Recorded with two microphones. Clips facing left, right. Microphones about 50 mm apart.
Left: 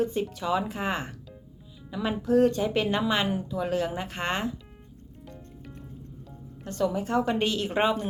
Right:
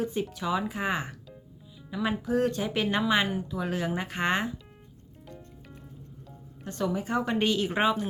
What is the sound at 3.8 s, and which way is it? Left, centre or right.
Speech, right.